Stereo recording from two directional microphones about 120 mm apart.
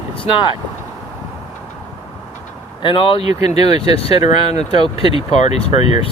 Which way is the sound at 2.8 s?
45° left (ahead or behind).